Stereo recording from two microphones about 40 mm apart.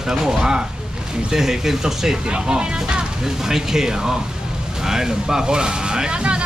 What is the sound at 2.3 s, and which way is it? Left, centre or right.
Speech, right.